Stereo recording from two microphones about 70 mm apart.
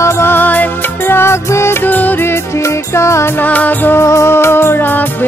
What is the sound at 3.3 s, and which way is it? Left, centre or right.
Music, left.